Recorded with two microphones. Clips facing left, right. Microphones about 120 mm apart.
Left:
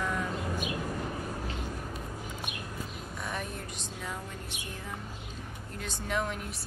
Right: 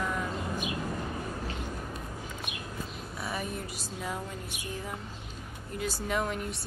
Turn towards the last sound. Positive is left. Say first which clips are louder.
# right 2 dB
turn(degrees=0)  # may be behind; listen again after turning